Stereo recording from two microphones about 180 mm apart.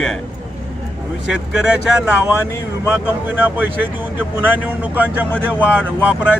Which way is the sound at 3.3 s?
10° right (ahead or behind).